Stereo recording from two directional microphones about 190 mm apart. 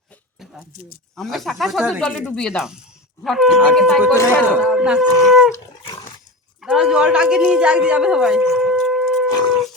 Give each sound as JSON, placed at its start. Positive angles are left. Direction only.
{"t": 1.1, "sound": "speech", "side_deg": 0}
{"t": 4.1, "sound": "speech", "side_deg": 15}
{"t": 4.5, "sound": "speech", "side_deg": -5}
{"t": 6.6, "sound": "speech", "side_deg": -5}